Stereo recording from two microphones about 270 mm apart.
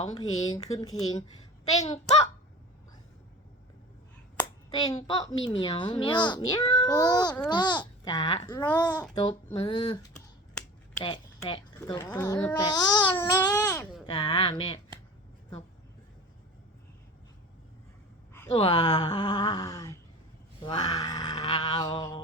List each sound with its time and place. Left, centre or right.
0.0 s speech: centre
1.7 s a child's voice: left
4.4 s a sound: centre
5.6 s speech: centre
8.4 s speech: centre
11.0 s a woman's voice: centre
14.1 s speech: centre
18.5 s speech: centre
20.6 s a sound: left